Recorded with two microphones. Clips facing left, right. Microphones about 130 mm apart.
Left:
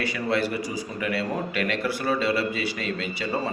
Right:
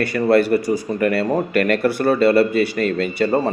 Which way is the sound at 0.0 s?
55° right (ahead or behind).